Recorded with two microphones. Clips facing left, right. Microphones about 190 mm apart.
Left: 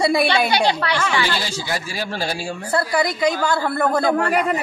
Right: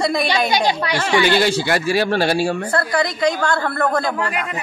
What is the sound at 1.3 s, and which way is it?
A man's voice, 65° right (ahead or behind).